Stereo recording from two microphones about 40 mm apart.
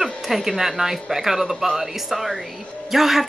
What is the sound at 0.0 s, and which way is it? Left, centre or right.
Speech, centre.